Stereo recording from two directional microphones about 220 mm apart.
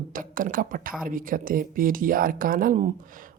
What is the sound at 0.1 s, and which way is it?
Speech, 40° right (ahead or behind).